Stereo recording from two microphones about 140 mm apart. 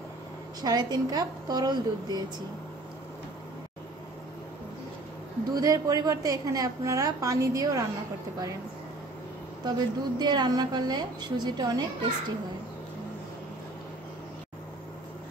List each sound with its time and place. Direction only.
0.6 s a woman's voice: 30° right (ahead or behind)
5.5 s a woman's voice: 25° right (ahead or behind)
9.7 s a woman's voice: 30° right (ahead or behind)